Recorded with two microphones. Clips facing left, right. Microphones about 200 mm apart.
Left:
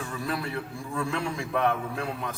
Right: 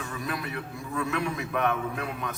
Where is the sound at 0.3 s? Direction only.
30° left (ahead or behind).